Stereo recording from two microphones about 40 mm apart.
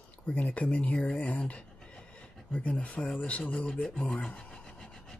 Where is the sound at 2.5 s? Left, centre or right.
Left.